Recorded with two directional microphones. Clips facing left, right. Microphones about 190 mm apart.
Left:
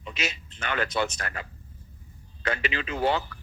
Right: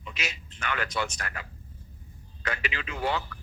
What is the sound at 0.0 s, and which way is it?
A man's voice, 25° left (ahead or behind).